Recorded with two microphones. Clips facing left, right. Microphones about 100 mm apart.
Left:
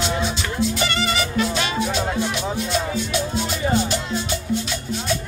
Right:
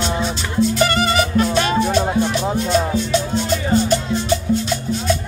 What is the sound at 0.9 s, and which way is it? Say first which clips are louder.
Music: right 5 dB; 40° right (ahead or behind).